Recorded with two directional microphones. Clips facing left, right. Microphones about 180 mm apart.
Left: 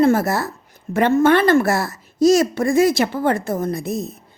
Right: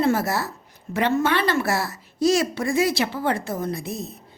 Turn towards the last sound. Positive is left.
turn(degrees=45)  # may be behind; listen again after turning